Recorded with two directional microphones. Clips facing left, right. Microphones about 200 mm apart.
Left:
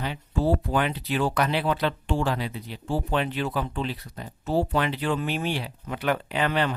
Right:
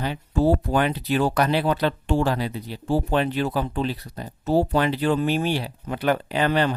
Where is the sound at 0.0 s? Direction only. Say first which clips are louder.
Right 5 dB; 40° right (ahead or behind).